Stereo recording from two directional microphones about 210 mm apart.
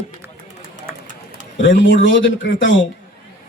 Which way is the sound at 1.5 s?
60° left (ahead or behind).